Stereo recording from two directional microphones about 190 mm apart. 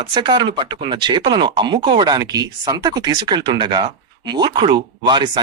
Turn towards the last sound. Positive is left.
turn(degrees=-25)  # may be behind; listen again after turning